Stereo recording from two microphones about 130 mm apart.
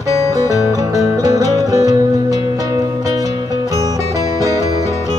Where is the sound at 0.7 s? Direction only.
25° right (ahead or behind).